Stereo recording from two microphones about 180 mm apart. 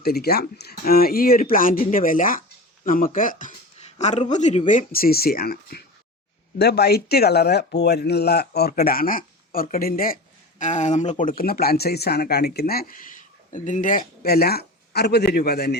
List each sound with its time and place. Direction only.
0.0 s speech: 60° left (ahead or behind)
10.6 s speech: 40° left (ahead or behind); by 15.8 s 60° left (ahead or behind)